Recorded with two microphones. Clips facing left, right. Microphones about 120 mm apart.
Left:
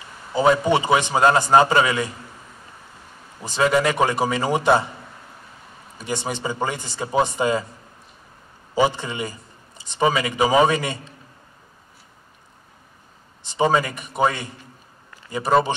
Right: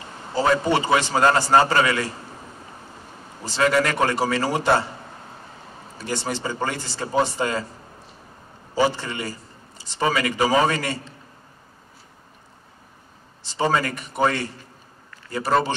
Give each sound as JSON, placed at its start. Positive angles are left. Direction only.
{"t": 0.3, "sound": "a man's voice", "side_deg": 15}
{"t": 3.4, "sound": "a man's voice", "side_deg": 15}
{"t": 5.9, "sound": "a man's voice", "side_deg": 15}
{"t": 8.7, "sound": "a man's voice", "side_deg": 15}
{"t": 13.5, "sound": "a man's voice", "side_deg": 15}
{"t": 15.0, "sound": "a sound", "side_deg": 15}